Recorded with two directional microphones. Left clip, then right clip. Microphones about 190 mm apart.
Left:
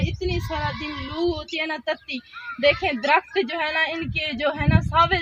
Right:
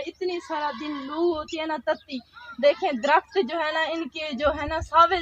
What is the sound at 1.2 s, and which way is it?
A woman's voice, 20° left (ahead or behind).